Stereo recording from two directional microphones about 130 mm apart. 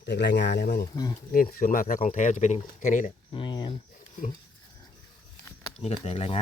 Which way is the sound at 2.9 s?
80° left.